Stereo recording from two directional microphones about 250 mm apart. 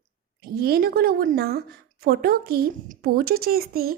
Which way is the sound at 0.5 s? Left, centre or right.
Right.